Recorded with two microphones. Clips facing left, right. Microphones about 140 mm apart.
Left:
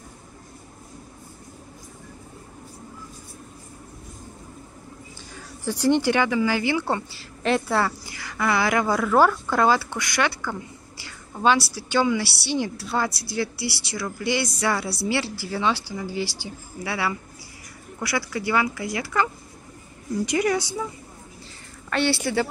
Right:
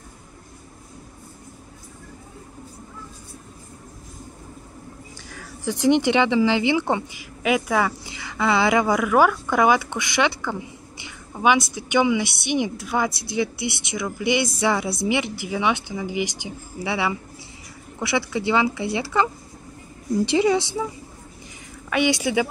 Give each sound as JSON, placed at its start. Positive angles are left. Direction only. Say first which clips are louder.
{"t": 5.7, "sound": "a woman's voice", "louder": "right 2 dB", "side_deg": -20}
{"t": 20.2, "sound": "a woman's voice", "louder": "right 3 dB", "side_deg": -25}
{"t": 21.9, "sound": "speech", "louder": "right 2 dB", "side_deg": -15}